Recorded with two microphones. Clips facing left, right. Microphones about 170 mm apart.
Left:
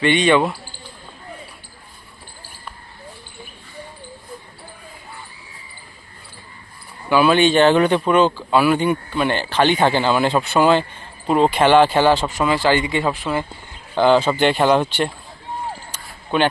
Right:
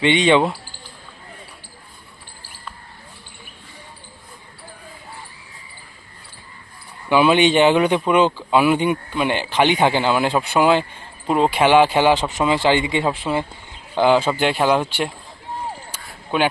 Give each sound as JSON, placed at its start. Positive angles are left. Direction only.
{"t": 0.0, "sound": "speech", "side_deg": -20}
{"t": 7.1, "sound": "speech", "side_deg": -20}
{"t": 15.9, "sound": "a sound", "side_deg": -10}